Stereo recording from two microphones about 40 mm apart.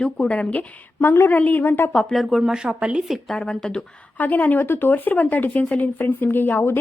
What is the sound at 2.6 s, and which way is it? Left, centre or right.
Speech, right.